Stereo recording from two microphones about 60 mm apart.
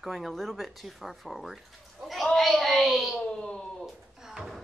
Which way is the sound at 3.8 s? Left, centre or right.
Centre.